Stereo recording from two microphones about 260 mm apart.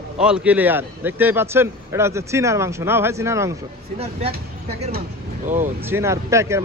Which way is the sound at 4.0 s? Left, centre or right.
Right.